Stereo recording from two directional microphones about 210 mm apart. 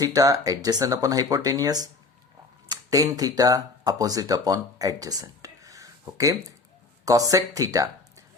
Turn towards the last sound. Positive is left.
turn(degrees=-15)  # may be behind; listen again after turning